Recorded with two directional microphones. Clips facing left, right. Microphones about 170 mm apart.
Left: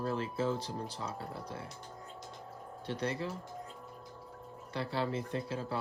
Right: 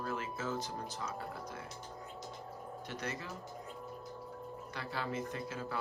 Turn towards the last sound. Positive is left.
turn(degrees=30)  # may be behind; listen again after turning